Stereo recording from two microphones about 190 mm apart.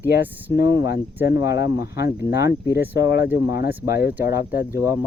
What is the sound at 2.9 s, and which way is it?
Speech, 60° left (ahead or behind).